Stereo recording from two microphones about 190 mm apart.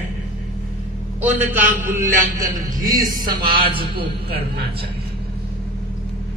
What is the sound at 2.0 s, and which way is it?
Speech, 45° right (ahead or behind).